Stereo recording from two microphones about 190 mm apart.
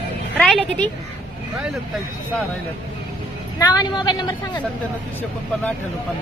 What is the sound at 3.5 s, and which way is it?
Speech, 20° left (ahead or behind).